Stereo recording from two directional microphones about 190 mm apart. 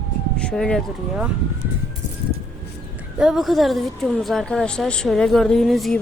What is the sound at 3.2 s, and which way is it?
A woman's voice, centre (ahead or behind).